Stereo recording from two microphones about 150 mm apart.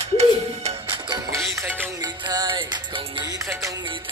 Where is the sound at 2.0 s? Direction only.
30° right (ahead or behind).